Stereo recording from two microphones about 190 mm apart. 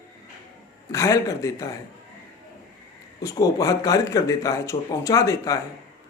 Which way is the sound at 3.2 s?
15° left (ahead or behind).